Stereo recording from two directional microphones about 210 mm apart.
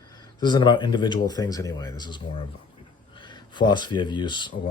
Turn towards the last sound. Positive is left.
turn(degrees=20)  # may be behind; listen again after turning